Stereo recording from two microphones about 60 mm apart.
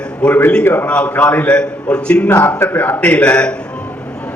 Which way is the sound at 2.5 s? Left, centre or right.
Left.